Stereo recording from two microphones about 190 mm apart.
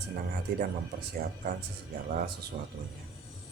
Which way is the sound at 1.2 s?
50° right (ahead or behind).